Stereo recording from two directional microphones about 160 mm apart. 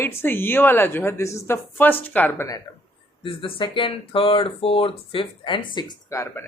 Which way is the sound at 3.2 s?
35° left (ahead or behind).